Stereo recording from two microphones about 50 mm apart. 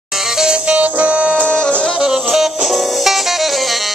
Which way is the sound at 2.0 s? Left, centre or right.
Centre.